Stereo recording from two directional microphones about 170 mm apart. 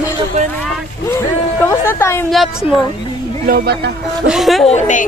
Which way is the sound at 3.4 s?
60° right (ahead or behind).